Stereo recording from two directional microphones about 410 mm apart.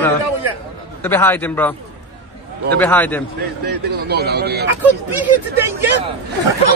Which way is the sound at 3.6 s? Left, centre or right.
Right.